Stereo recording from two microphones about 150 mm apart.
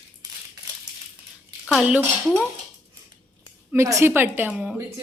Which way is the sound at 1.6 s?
5° left (ahead or behind).